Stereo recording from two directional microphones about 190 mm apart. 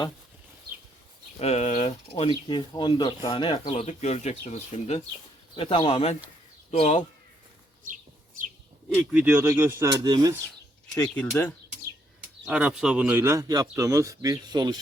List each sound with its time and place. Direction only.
1.4 s speech: 35° left (ahead or behind)
9.2 s speech: 15° right (ahead or behind)
11.1 s speech: 10° left (ahead or behind)
12.5 s speech: 5° right (ahead or behind); by 14.8 s 20° right (ahead or behind)